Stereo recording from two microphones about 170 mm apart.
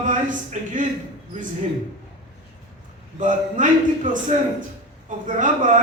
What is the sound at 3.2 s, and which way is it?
Speech, 50° right (ahead or behind).